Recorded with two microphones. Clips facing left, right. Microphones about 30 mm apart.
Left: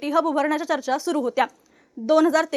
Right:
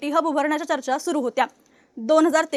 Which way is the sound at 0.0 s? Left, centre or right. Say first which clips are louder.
Even; centre.